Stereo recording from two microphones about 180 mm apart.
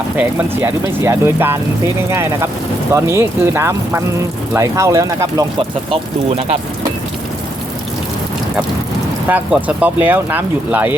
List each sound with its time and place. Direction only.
0.2 s speech: 10° right (ahead or behind)
5.9 s speech: 35° right (ahead or behind)
9.3 s speech: 10° right (ahead or behind)